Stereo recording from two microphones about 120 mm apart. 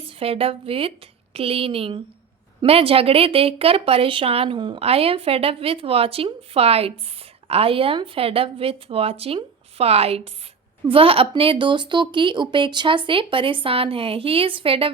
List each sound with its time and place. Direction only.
0.2 s speech: 50° right (ahead or behind)
4.8 s speech: 55° right (ahead or behind)